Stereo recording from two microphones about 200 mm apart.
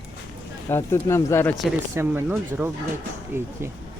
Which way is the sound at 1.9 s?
10° right (ahead or behind).